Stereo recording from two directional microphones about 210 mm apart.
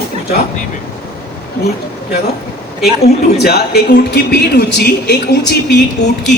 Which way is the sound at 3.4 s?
50° left (ahead or behind).